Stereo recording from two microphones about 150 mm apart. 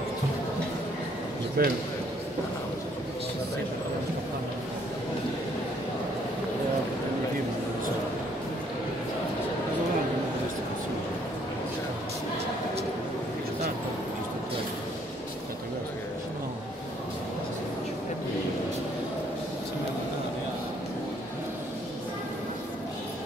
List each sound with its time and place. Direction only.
1.6 s speech: 90° right